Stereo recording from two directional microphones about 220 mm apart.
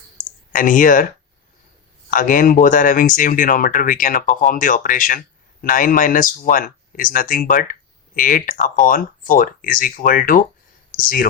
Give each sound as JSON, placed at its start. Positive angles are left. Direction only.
{"t": 0.5, "sound": "speech", "side_deg": 35}
{"t": 2.0, "sound": "speech", "side_deg": 40}